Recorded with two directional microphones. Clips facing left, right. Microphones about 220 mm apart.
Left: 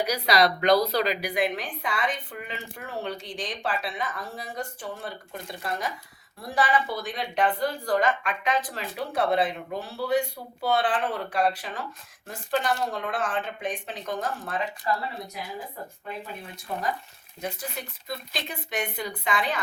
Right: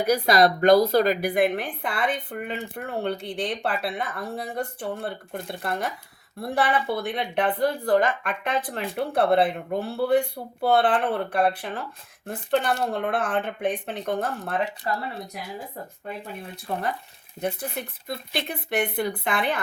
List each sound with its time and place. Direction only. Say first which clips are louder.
0.0 s a woman's voice: right 4 dB; 50° right (ahead or behind)
14.8 s speech: even; 45° right (ahead or behind)
17.4 s a woman's voice: right 5 dB; 60° right (ahead or behind)